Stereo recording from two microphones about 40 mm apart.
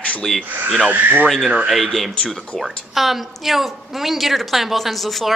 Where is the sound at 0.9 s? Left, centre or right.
Right.